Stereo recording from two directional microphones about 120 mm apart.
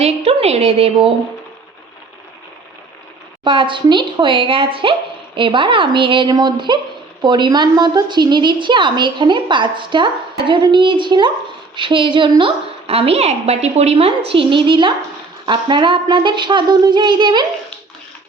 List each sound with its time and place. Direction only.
0.0 s a woman's voice: 55° right (ahead or behind)
3.4 s a woman's voice: 45° right (ahead or behind)